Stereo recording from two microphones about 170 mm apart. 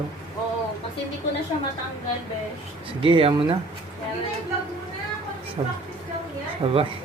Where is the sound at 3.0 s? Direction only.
30° right (ahead or behind).